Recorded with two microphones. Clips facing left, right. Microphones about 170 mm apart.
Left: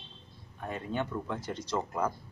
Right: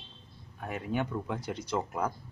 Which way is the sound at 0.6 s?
10° right (ahead or behind).